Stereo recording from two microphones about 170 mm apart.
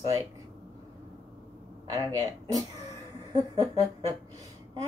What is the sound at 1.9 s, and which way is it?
Speech, 20° right (ahead or behind).